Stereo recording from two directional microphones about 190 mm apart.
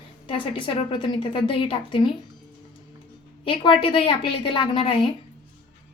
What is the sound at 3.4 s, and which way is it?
A woman's voice, 25° left (ahead or behind).